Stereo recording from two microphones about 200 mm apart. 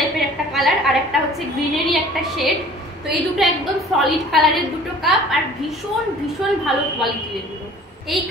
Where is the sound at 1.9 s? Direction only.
Centre (ahead or behind).